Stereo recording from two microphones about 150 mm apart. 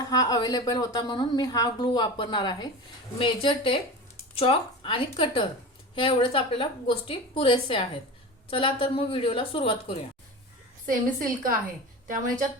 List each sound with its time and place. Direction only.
0.0 s a woman's voice: 25° left (ahead or behind)
10.8 s a woman's voice: 65° right (ahead or behind)